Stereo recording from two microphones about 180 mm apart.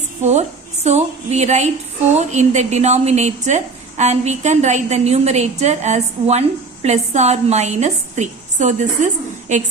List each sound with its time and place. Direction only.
0.2 s a woman's voice: 40° right (ahead or behind)